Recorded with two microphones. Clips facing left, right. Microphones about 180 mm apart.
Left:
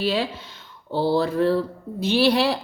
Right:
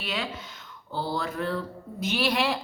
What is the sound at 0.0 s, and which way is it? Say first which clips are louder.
A woman's voice: left 9 dB; 30° left (ahead or behind).